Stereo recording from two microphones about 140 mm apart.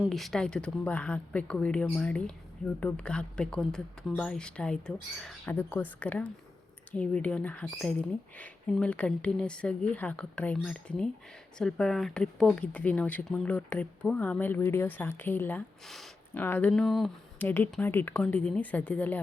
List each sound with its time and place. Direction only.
0.1 s speech: centre (ahead or behind)
5.5 s speech: 15° left (ahead or behind)
17.4 s speech: 15° left (ahead or behind)